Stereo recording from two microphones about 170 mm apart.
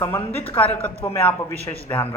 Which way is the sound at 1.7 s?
20° left (ahead or behind).